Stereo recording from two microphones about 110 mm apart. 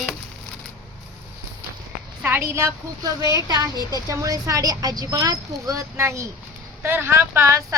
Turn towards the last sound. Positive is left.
turn(degrees=-25)  # may be behind; listen again after turning